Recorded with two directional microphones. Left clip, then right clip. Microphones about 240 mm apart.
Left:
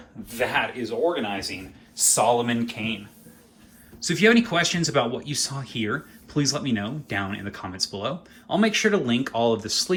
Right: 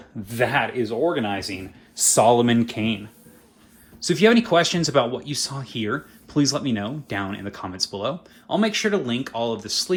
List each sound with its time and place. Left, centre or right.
0.3 s speech: right
4.0 s speech: centre